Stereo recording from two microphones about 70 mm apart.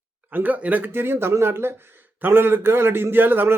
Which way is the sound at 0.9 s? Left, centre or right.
Right.